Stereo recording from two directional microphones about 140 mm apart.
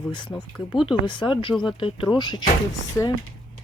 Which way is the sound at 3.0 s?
20° left (ahead or behind).